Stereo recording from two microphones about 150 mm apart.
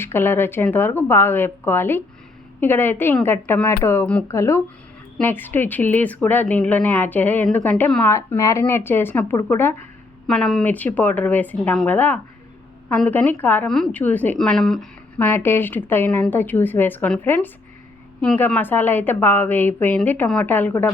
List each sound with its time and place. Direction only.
0.0 s a woman's voice: 15° left (ahead or behind)
10.2 s a woman's voice: 5° left (ahead or behind)